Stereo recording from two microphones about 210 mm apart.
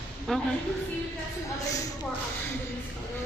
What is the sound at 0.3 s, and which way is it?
Speech, 5° left (ahead or behind).